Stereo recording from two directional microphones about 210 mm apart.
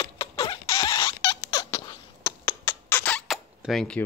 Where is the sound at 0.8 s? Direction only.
25° left (ahead or behind); by 3.4 s 5° left (ahead or behind).